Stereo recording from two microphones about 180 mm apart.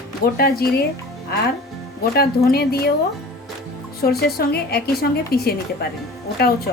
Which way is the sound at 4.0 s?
60° left (ahead or behind).